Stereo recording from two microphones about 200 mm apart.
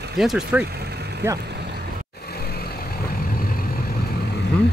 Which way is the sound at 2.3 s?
50° left (ahead or behind).